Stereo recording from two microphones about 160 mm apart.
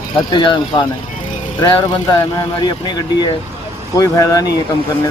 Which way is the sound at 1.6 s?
30° left (ahead or behind).